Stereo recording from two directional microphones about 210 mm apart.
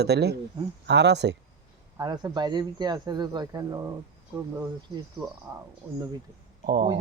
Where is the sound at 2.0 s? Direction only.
20° right (ahead or behind).